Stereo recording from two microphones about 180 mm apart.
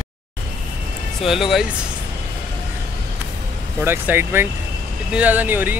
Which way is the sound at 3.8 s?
10° right (ahead or behind).